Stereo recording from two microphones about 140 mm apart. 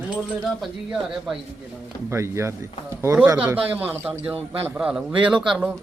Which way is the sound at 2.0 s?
20° right (ahead or behind).